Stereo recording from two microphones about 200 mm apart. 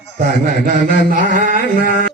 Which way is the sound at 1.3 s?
40° right (ahead or behind).